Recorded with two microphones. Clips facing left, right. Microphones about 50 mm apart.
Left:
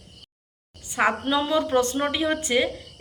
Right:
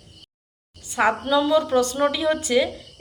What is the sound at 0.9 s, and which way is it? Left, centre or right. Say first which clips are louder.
A woman's voice: right 2 dB; left.